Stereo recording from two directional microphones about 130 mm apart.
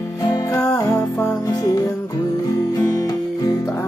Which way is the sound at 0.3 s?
25° left (ahead or behind).